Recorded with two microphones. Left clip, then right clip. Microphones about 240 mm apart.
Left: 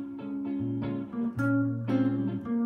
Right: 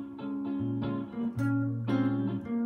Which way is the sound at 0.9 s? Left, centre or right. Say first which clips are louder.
Left 1 dB; centre.